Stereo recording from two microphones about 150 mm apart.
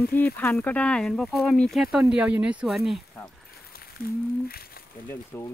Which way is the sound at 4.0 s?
90° left.